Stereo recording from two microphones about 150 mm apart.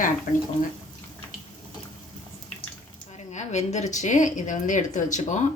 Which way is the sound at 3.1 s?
50° left (ahead or behind).